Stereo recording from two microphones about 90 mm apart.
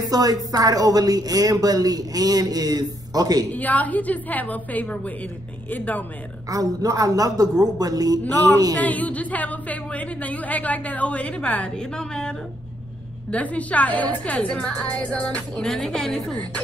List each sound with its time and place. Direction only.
0.1 s a woman's voice: 45° right (ahead or behind)
3.5 s a woman's voice: 20° left (ahead or behind)
6.5 s a woman's voice: 40° right (ahead or behind)
8.7 s a woman's voice: 15° left (ahead or behind)